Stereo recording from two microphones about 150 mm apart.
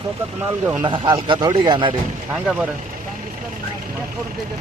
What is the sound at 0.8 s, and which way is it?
Speech, 30° right (ahead or behind).